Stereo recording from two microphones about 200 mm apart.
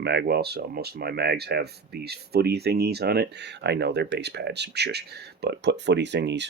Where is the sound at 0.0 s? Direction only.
55° right (ahead or behind).